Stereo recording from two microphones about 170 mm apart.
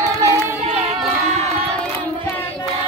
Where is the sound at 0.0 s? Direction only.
15° right (ahead or behind).